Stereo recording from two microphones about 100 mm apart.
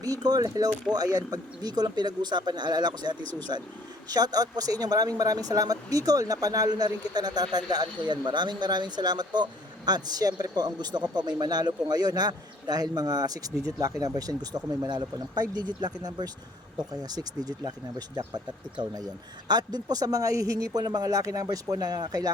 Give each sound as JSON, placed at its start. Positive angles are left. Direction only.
{"t": 0.0, "sound": "speech", "side_deg": -40}
{"t": 19.5, "sound": "speech", "side_deg": -40}